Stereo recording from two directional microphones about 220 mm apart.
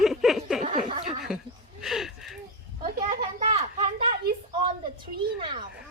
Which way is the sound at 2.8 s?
35° right (ahead or behind).